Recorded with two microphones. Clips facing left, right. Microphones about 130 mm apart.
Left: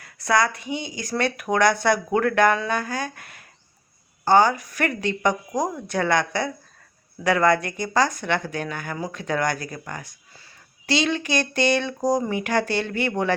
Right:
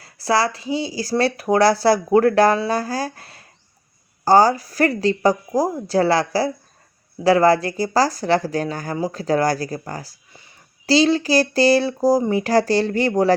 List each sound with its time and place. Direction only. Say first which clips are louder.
0.0 s speech: right 2 dB; 30° right (ahead or behind)